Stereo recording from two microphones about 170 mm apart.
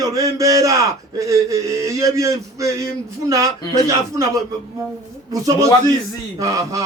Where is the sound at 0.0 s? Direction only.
20° right (ahead or behind).